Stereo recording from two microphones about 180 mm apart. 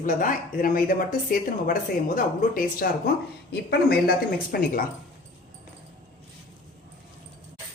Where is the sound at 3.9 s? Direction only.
55° left (ahead or behind).